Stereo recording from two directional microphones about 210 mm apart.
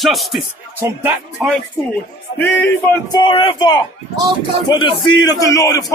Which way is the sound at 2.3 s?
10° left (ahead or behind).